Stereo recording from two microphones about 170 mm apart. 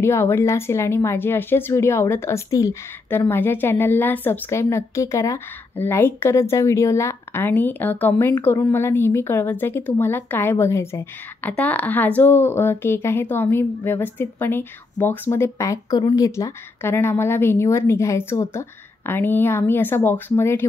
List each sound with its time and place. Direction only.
0.0 s speech: 15° left (ahead or behind)